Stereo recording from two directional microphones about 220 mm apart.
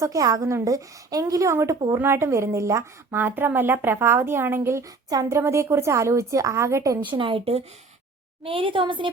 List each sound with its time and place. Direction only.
0.0 s a woman's voice: 15° right (ahead or behind)
7.2 s a woman's voice: 25° right (ahead or behind)